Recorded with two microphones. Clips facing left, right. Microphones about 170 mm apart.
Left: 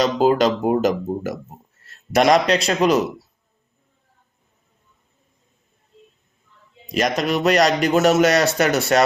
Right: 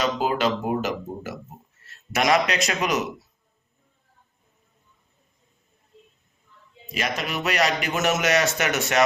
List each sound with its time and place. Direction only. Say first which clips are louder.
0.0 s a man's voice: left 7 dB; 35° left (ahead or behind)
6.9 s a man's voice: left 8 dB; 40° left (ahead or behind)